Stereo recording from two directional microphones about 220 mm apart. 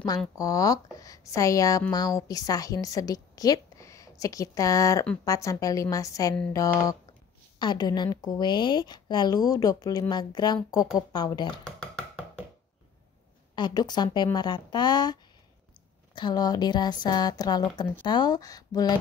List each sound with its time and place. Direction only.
0.4 s a woman's voice: 15° left (ahead or behind)
7.5 s speech: 20° left (ahead or behind)
11.6 s a sound: 5° left (ahead or behind)
13.6 s speech: 20° left (ahead or behind)
16.2 s speech: 20° left (ahead or behind)